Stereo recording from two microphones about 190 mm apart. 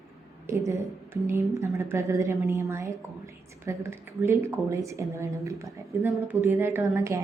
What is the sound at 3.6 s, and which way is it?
A woman's voice, 15° right (ahead or behind).